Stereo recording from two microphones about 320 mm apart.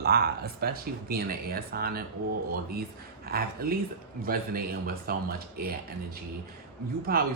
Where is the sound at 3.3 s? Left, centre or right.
Right.